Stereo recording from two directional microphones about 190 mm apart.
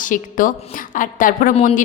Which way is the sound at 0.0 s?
45° left (ahead or behind).